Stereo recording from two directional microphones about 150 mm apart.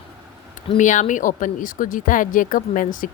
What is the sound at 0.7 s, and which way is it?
Speech, 55° left (ahead or behind).